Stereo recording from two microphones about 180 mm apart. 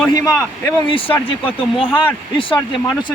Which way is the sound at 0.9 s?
30° left (ahead or behind).